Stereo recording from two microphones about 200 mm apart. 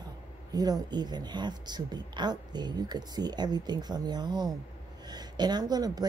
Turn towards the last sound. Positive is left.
turn(degrees=-20)  # may be behind; listen again after turning